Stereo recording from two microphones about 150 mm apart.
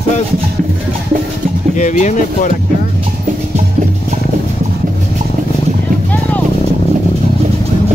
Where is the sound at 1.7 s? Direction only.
55° left (ahead or behind).